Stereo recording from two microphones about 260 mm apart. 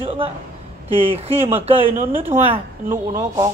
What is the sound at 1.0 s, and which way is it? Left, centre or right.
A woman's voice, right.